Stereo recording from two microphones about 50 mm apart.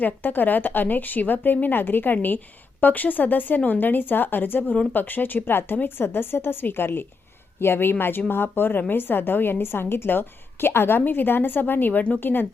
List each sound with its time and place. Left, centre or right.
0.0 s a woman's voice: left